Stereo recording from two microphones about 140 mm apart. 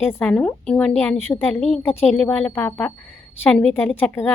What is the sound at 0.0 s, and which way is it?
A woman's voice, 15° left (ahead or behind).